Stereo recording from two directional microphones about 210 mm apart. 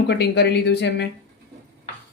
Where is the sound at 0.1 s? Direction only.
50° left (ahead or behind).